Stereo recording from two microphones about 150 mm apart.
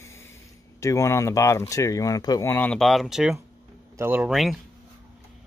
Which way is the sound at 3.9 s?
15° right (ahead or behind).